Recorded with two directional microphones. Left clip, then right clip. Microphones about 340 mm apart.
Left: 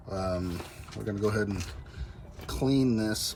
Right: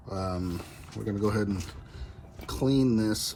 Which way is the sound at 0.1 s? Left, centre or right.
Centre.